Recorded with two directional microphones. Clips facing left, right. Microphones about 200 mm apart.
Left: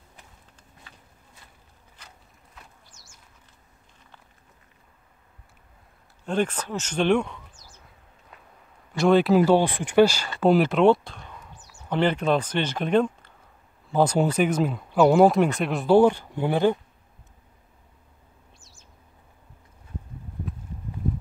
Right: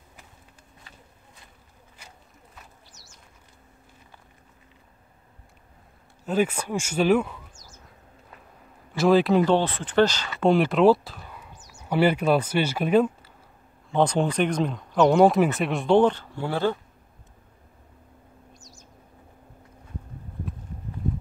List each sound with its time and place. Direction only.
2.9 s bird: 50° left (ahead or behind)
6.2 s speech: 5° right (ahead or behind)
7.5 s a sound: 45° right (ahead or behind)
8.9 s speech: centre (ahead or behind)
13.9 s speech: 5° left (ahead or behind)
18.6 s bird: 40° right (ahead or behind)